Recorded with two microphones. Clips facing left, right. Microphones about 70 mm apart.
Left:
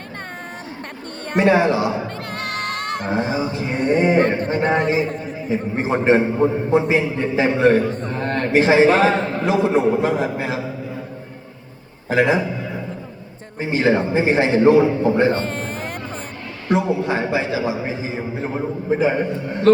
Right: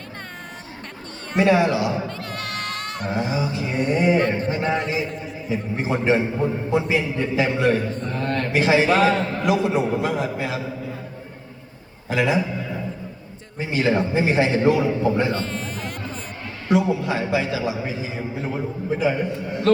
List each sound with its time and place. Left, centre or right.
1.3 s music: left
3.0 s speech: left
12.0 s speech: left
13.6 s speech: left
19.7 s speech: left